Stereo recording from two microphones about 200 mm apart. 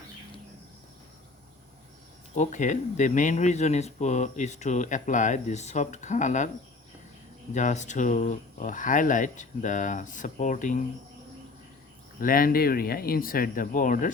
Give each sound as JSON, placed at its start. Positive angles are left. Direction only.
{"t": 2.3, "sound": "speech", "side_deg": 35}
{"t": 7.5, "sound": "speech", "side_deg": 35}
{"t": 12.2, "sound": "speech", "side_deg": 45}